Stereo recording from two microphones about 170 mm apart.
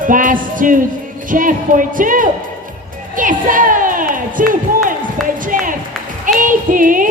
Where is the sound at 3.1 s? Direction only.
50° right (ahead or behind).